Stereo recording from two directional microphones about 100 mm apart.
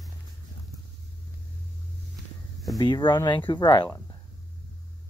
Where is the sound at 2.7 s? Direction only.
50° left (ahead or behind).